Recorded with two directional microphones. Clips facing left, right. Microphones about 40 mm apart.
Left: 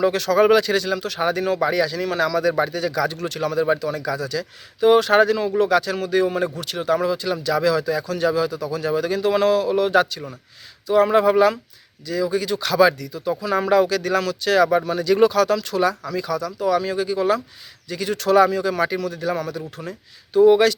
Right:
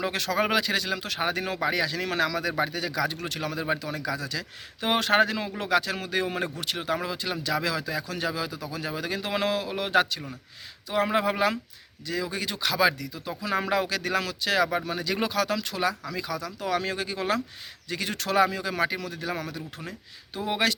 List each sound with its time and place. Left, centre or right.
0.0 s speech: right
0.3 s speech: centre
2.0 s speech: right
2.2 s speech: right
2.5 s speech: centre
3.2 s speech: right
12.0 s speech: right
12.5 s speech: centre
16.6 s speech: right
18.3 s speech: centre